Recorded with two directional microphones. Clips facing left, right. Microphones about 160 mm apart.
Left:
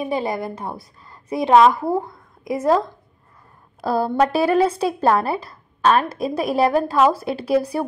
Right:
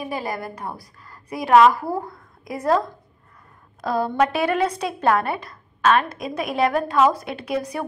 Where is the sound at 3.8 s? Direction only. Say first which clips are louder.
Left 2 dB; 35° left (ahead or behind).